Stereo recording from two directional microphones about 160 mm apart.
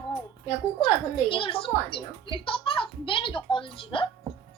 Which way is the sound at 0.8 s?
35° left (ahead or behind).